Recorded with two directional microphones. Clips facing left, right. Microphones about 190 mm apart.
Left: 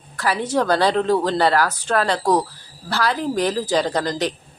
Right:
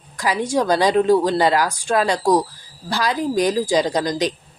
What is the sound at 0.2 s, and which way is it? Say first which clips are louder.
Speech: right 1 dB; 15° right (ahead or behind).